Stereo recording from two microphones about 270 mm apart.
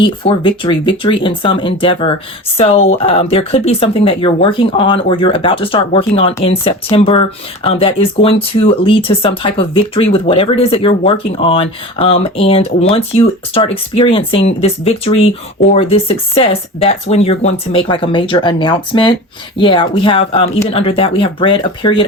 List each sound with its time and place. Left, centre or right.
0.0 s speech: centre